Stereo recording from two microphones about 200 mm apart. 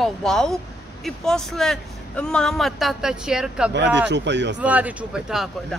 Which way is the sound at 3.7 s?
60° right (ahead or behind).